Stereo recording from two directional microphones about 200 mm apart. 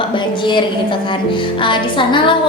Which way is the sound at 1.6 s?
25° left (ahead or behind).